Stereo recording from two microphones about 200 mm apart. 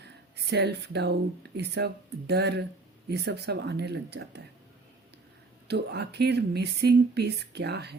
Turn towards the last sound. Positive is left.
turn(degrees=-55)  # may be behind; listen again after turning